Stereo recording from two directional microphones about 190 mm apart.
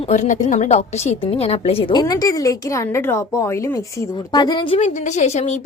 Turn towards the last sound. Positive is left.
turn(degrees=35)  # may be behind; listen again after turning